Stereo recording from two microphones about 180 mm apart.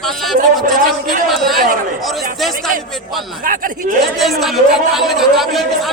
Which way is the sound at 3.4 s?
50° right (ahead or behind).